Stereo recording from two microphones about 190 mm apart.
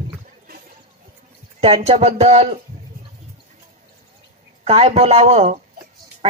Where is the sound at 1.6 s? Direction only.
30° right (ahead or behind).